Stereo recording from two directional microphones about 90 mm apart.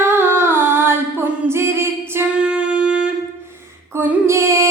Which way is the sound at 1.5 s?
30° right (ahead or behind).